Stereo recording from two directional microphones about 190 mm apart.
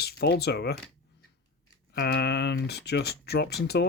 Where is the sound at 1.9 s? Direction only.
60° left (ahead or behind).